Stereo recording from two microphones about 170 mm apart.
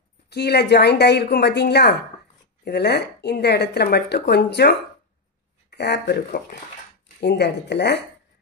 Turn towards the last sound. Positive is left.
turn(degrees=80)